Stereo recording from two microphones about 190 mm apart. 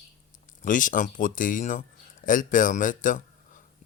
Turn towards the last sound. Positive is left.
turn(degrees=45)  # may be behind; listen again after turning